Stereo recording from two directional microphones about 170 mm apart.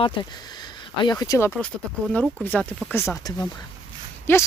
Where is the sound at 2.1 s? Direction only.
10° left (ahead or behind).